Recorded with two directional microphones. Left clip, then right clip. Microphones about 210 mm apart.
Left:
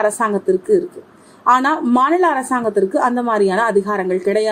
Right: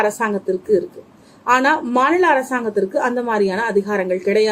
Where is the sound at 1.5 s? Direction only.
15° left (ahead or behind).